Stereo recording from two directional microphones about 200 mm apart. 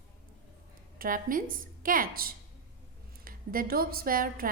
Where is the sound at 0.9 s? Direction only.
45° right (ahead or behind).